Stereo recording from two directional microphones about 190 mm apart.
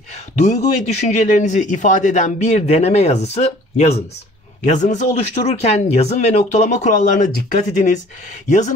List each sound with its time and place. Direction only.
0.8 s speech: 40° left (ahead or behind)